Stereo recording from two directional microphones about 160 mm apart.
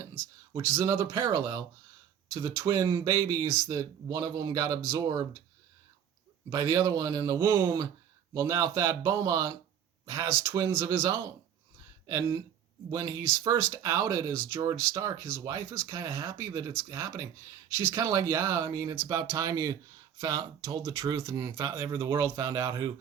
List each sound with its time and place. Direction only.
0.6 s speech: 20° right (ahead or behind)
6.5 s speech: 20° right (ahead or behind)